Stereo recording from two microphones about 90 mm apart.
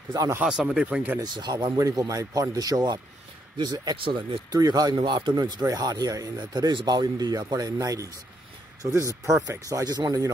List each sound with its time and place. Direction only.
0.5 s speech: 5° right (ahead or behind)
0.8 s speech: 20° right (ahead or behind)
1.2 s speech: 55° right (ahead or behind)
1.8 s speech: 40° right (ahead or behind)
3.9 s speech: 70° right (ahead or behind)
4.5 s speech: 45° right (ahead or behind)
4.9 s speech: 60° right (ahead or behind); by 10.3 s 45° right (ahead or behind)